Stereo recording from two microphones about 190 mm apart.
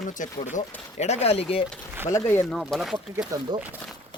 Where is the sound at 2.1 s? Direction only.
10° left (ahead or behind).